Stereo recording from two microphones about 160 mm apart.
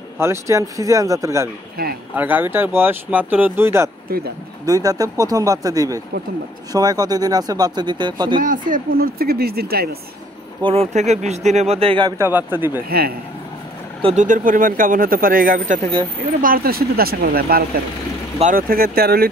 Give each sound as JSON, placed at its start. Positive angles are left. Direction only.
{"t": 0.2, "sound": "speech", "side_deg": -20}
{"t": 1.8, "sound": "speech", "side_deg": -70}
{"t": 2.1, "sound": "speech", "side_deg": -10}
{"t": 8.4, "sound": "speech", "side_deg": -55}
{"t": 10.6, "sound": "speech", "side_deg": -40}
{"t": 12.2, "sound": "speech", "side_deg": -10}
{"t": 12.8, "sound": "speech", "side_deg": -75}
{"t": 14.0, "sound": "speech", "side_deg": -50}